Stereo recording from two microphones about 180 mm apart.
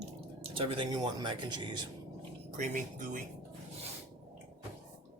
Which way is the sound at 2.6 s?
45° right (ahead or behind).